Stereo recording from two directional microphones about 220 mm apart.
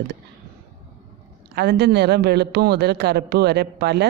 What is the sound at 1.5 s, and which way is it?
A man's voice, 50° right (ahead or behind).